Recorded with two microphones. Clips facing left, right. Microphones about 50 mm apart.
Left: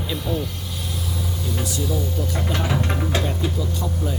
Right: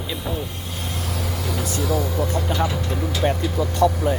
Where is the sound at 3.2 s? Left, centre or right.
Right.